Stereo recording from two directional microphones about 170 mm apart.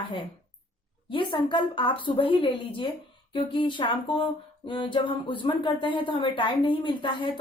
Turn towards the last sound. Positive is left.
turn(degrees=30)  # may be behind; listen again after turning